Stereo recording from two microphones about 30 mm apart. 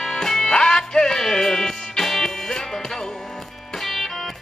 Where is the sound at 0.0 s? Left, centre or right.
Centre.